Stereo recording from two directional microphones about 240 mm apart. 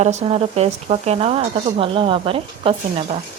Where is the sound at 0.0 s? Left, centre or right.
Right.